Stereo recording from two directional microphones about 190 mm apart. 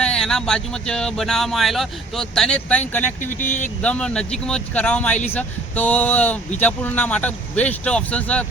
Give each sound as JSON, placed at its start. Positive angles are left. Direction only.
{"t": 0.0, "sound": "speech", "side_deg": 5}
{"t": 3.2, "sound": "speech", "side_deg": 40}
{"t": 3.8, "sound": "speech", "side_deg": 5}